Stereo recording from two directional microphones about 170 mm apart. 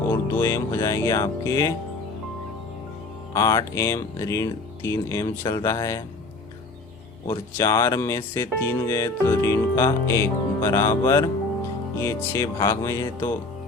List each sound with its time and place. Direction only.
0.1 s speech: 15° left (ahead or behind)
3.3 s speech: 20° left (ahead or behind)
7.3 s speech: 15° left (ahead or behind)